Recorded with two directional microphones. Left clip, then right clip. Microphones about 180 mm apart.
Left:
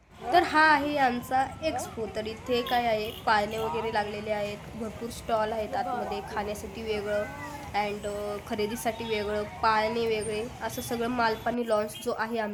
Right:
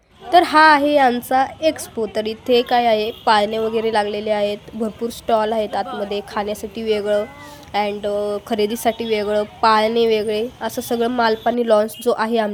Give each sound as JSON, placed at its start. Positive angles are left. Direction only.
{"t": 0.3, "sound": "a woman's voice", "side_deg": -45}